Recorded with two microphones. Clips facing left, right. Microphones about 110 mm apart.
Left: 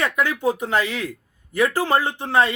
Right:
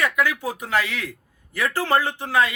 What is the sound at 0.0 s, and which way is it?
A man's voice, 25° left (ahead or behind).